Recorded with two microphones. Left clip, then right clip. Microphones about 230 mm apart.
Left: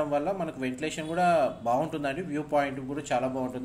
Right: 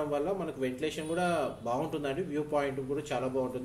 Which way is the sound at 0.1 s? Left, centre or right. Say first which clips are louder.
Left 3 dB; left.